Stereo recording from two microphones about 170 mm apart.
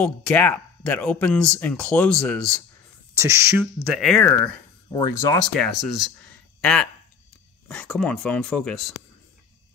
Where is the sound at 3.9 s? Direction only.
5° left (ahead or behind).